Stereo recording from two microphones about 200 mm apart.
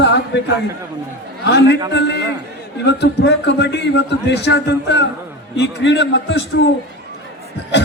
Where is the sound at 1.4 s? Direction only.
55° left (ahead or behind).